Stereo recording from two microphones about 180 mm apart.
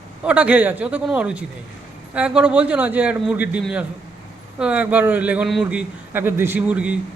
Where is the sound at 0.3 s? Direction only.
5° right (ahead or behind).